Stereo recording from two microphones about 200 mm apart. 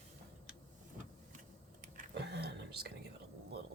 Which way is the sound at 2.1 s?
60° right (ahead or behind).